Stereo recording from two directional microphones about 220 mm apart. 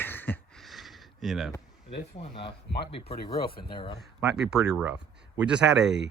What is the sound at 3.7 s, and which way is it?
Speech, 25° left (ahead or behind).